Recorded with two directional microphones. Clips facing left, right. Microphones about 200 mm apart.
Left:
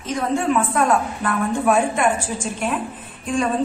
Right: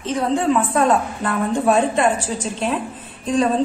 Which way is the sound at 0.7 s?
25° right (ahead or behind).